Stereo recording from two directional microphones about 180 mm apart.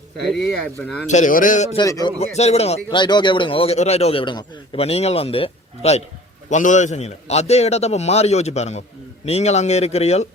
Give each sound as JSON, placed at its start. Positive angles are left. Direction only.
{"t": 1.0, "sound": "a man's voice", "side_deg": 45}
{"t": 1.7, "sound": "a man's voice", "side_deg": 20}
{"t": 2.1, "sound": "speech", "side_deg": 35}